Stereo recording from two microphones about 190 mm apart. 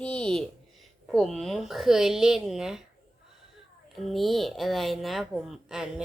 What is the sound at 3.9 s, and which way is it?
Speech, centre (ahead or behind).